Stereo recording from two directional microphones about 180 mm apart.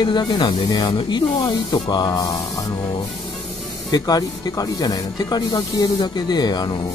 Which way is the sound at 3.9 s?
20° left (ahead or behind).